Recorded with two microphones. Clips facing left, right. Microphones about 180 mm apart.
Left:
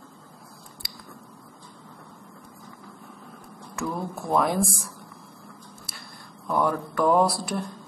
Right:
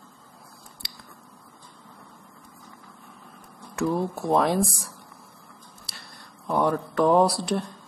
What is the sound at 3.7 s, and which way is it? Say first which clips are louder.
Speech: right 5 dB; 30° right (ahead or behind).